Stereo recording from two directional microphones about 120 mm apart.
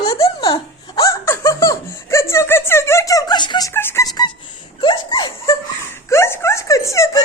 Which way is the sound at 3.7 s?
20° left (ahead or behind).